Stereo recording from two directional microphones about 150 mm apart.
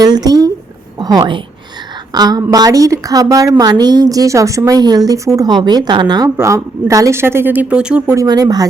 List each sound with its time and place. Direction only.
0.0 s a woman's voice: 25° right (ahead or behind); by 8.1 s 5° right (ahead or behind)
8.1 s a woman's voice: 25° right (ahead or behind)